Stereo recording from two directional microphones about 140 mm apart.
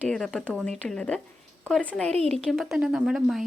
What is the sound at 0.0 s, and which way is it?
Speech, 5° left (ahead or behind).